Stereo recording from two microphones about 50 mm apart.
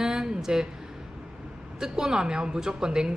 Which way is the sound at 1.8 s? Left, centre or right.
Centre.